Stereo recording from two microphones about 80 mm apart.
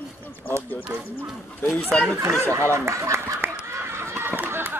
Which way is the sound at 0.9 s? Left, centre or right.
Right.